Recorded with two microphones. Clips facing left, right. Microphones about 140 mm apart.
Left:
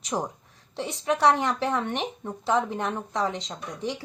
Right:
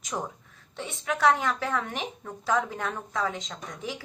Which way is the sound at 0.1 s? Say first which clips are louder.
Left 4 dB; 25° left (ahead or behind).